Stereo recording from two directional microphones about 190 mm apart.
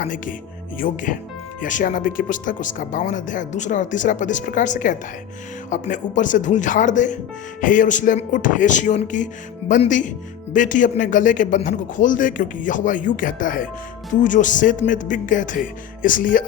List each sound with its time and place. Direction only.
0.0 s speech: 45° left (ahead or behind)